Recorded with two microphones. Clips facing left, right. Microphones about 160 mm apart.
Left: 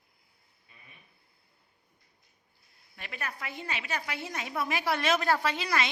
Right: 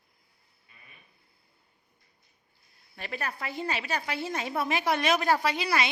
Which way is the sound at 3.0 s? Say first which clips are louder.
Right 4 dB; 35° right (ahead or behind).